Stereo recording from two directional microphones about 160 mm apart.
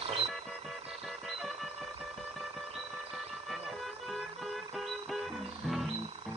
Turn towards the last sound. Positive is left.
turn(degrees=0)  # may be behind; listen again after turning